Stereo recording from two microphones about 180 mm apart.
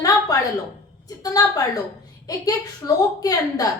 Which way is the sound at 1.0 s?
20° left (ahead or behind).